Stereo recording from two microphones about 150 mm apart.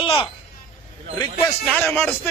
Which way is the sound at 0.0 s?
35° left (ahead or behind).